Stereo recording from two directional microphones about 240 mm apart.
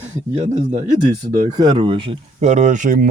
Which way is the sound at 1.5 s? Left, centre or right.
Centre.